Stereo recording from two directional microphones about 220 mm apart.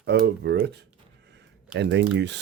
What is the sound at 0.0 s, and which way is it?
Speech, 50° right (ahead or behind).